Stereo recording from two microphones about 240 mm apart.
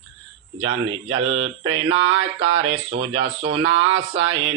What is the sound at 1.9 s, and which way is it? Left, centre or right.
Speech, right.